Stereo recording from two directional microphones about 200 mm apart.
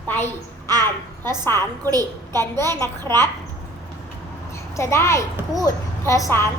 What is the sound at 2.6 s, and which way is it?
Speech, 15° left (ahead or behind).